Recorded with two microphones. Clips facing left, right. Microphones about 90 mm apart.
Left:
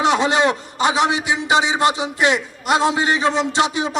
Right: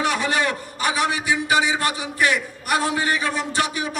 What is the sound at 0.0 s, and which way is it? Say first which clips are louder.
A man's voice: left 6 dB; 25° left (ahead or behind).